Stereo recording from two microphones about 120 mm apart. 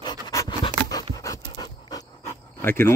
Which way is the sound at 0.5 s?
35° left (ahead or behind).